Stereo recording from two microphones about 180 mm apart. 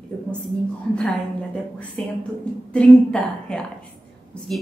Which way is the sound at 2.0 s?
5° left (ahead or behind).